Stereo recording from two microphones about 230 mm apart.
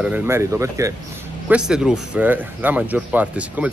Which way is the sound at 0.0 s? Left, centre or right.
Centre.